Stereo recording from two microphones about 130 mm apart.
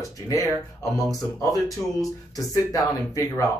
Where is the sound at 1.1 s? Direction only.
25° left (ahead or behind).